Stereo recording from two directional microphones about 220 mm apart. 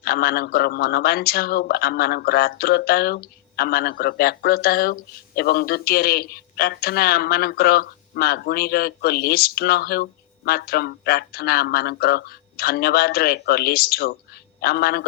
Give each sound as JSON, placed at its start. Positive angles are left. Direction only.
{"t": 0.0, "sound": "a man's voice", "side_deg": 45}